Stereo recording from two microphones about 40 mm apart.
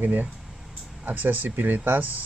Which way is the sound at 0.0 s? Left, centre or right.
Right.